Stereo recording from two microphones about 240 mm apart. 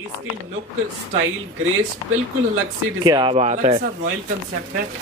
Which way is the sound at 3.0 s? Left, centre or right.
Centre.